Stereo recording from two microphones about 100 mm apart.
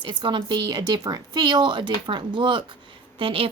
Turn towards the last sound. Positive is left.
turn(degrees=-65)  # may be behind; listen again after turning